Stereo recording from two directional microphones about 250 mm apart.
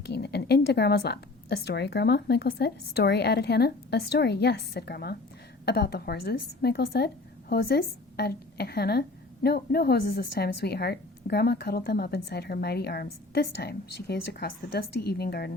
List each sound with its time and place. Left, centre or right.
0.0 s a woman's voice: left